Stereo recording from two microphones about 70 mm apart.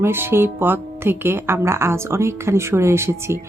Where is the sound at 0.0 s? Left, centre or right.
Right.